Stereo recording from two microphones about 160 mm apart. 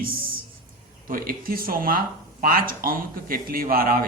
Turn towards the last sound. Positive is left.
turn(degrees=-65)  # may be behind; listen again after turning